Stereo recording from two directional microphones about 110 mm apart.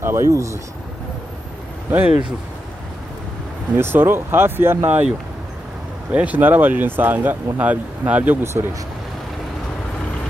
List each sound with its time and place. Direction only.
0.0 s speech: 25° right (ahead or behind)
1.9 s speech: 15° right (ahead or behind)
3.7 s speech: 20° right (ahead or behind)
6.1 s speech: 15° right (ahead or behind)